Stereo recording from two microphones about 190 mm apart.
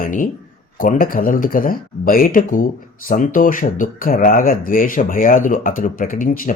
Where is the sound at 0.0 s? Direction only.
45° left (ahead or behind).